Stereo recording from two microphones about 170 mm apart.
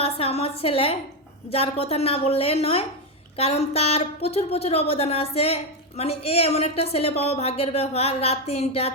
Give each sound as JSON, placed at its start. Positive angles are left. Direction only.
{"t": 0.0, "sound": "a woman's voice", "side_deg": 35}